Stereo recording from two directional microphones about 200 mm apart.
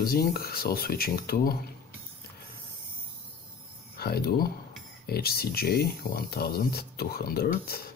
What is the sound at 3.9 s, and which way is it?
Speech, 50° left (ahead or behind).